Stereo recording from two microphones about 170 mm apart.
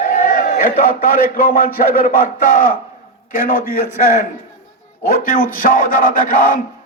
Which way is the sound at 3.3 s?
55° left (ahead or behind).